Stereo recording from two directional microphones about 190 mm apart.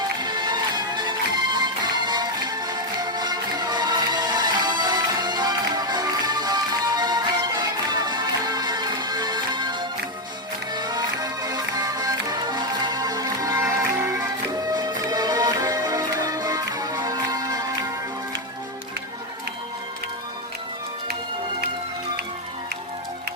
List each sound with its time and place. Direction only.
0.2 s music: 20° right (ahead or behind)